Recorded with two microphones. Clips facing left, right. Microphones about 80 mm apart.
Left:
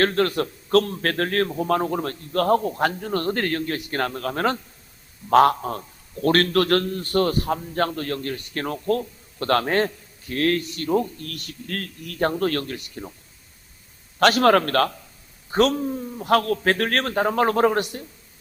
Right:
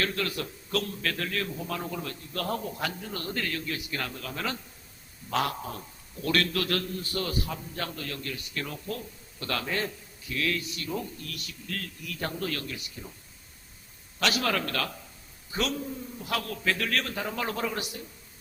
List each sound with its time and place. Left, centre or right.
0.0 s a man's voice: left
14.2 s a man's voice: left